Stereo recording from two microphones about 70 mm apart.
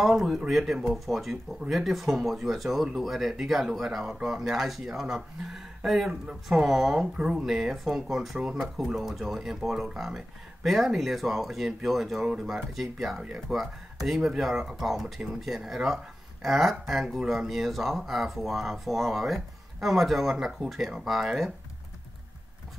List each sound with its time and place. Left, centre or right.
0.0 s speech: centre